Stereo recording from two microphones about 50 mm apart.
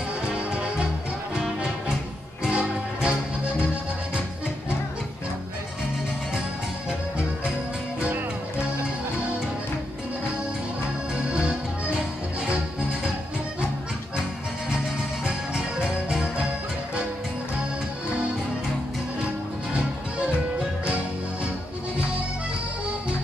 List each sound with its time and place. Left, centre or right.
0.3 s music: centre
11.2 s accordion: centre
19.7 s music: centre